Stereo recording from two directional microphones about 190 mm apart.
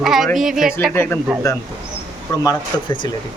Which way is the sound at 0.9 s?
10° left (ahead or behind).